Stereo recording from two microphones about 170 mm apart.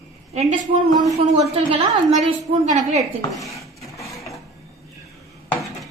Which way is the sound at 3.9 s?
20° left (ahead or behind).